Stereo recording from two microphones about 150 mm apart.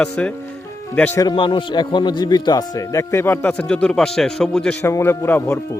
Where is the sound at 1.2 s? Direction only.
30° left (ahead or behind); by 4.8 s 5° left (ahead or behind).